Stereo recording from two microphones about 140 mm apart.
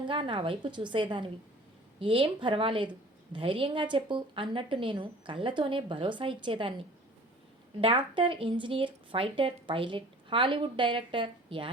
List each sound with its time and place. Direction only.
0.1 s a woman's voice: 35° right (ahead or behind)
7.8 s a woman's voice: 35° right (ahead or behind)